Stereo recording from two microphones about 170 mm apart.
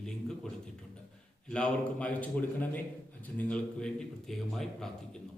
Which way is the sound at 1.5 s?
5° left (ahead or behind).